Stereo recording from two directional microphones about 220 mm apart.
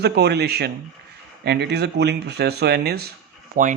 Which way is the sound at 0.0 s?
50° right (ahead or behind).